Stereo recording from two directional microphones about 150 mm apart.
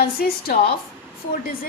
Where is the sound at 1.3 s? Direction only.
75° left (ahead or behind).